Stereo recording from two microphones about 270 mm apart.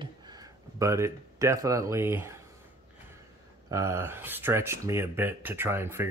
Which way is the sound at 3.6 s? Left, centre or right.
Centre.